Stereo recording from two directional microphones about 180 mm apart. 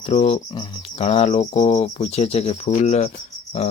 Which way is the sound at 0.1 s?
35° left (ahead or behind).